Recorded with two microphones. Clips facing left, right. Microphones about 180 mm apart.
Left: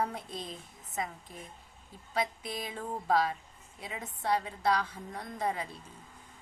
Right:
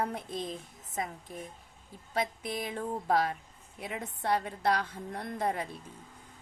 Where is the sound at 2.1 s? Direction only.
55° right (ahead or behind).